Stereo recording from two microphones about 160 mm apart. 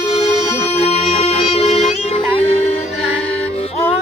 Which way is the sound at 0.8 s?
40° left (ahead or behind).